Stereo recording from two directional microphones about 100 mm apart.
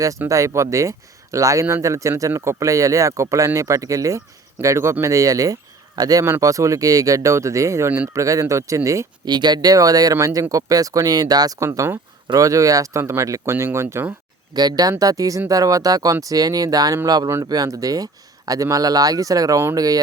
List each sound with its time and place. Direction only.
0.3 s speech: 30° right (ahead or behind)
8.1 s speech: 35° right (ahead or behind)
9.2 s speech: 45° right (ahead or behind)
11.6 s speech: 30° right (ahead or behind)
14.5 s speech: 40° right (ahead or behind)